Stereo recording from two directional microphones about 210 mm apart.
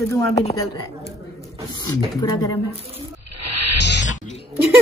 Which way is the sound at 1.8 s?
15° left (ahead or behind).